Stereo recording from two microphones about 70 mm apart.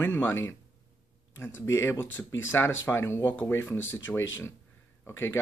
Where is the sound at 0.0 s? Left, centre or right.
Left.